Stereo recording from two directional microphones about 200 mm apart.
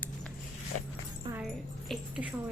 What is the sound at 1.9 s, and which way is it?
Speech, 5° right (ahead or behind).